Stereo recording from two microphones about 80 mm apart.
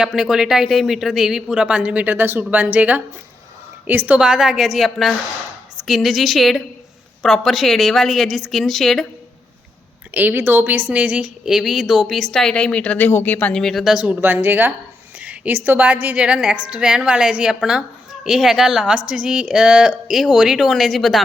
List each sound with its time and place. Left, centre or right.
0.0 s a woman's voice: centre
10.2 s a woman's voice: right; by 13.5 s left
13.5 s a woman's voice: centre
13.8 s a woman's voice: centre
14.1 s a woman's voice: right; by 21.2 s centre